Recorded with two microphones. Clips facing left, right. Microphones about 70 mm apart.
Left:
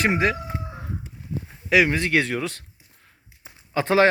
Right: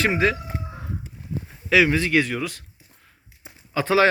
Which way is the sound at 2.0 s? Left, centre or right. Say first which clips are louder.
Right 1 dB; left.